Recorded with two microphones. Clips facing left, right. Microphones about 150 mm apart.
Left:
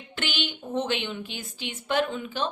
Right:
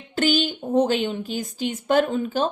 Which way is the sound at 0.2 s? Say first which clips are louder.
Right 11 dB; 40° right (ahead or behind).